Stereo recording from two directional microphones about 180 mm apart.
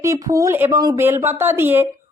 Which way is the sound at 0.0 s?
20° right (ahead or behind).